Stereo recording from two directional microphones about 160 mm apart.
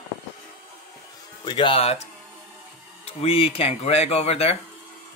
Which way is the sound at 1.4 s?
30° left (ahead or behind).